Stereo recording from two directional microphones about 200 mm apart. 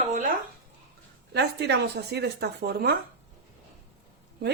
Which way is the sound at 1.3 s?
55° right (ahead or behind).